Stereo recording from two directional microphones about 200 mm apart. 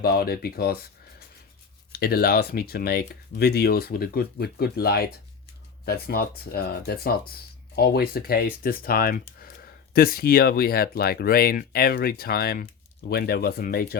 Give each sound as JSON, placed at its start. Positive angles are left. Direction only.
{"t": 0.0, "sound": "speech", "side_deg": 50}
{"t": 1.9, "sound": "speech", "side_deg": 50}